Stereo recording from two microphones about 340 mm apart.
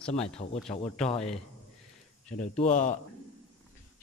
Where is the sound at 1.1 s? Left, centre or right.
Centre.